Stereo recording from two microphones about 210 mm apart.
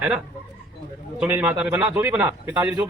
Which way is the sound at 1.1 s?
5° right (ahead or behind).